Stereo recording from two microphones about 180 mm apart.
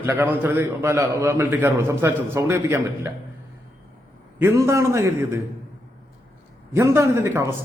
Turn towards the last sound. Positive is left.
turn(degrees=-15)  # may be behind; listen again after turning